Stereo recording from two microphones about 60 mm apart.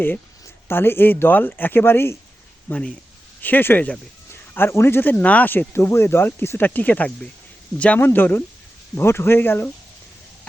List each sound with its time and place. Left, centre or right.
0.7 s speech: left
5.2 s speech: left
5.7 s speech: left
6.7 s speech: left